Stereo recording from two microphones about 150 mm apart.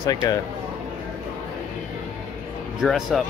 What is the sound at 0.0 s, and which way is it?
Speech, 25° left (ahead or behind).